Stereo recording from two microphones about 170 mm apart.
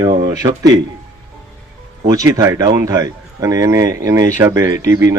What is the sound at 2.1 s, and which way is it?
Speech, 20° right (ahead or behind).